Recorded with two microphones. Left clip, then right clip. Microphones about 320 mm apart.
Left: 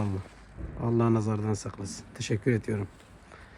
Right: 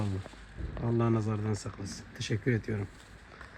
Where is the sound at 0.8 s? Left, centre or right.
Left.